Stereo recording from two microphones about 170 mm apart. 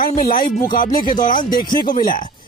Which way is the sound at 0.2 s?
55° left (ahead or behind).